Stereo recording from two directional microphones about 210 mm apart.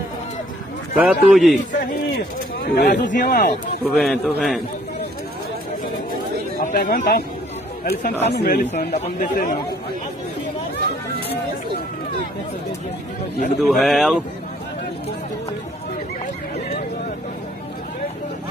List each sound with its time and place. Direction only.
0.9 s a man's voice: 5° right (ahead or behind)
2.6 s speech: 45° left (ahead or behind)
3.8 s a man's voice: 5° left (ahead or behind)
6.6 s speech: 40° left (ahead or behind)
8.9 s speech: 35° left (ahead or behind)
13.6 s a man's voice: centre (ahead or behind)